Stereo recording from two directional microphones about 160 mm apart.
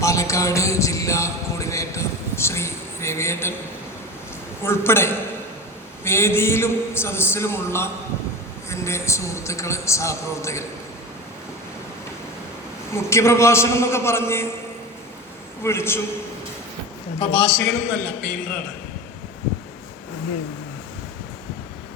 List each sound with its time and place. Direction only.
0.0 s a sound: 20° left (ahead or behind)
4.6 s a man's voice: 15° left (ahead or behind)
12.9 s a man's voice: 15° left (ahead or behind)
15.6 s a man's voice: 15° left (ahead or behind)
17.2 s a man's voice: 30° left (ahead or behind)
17.5 s a man's voice: 10° left (ahead or behind)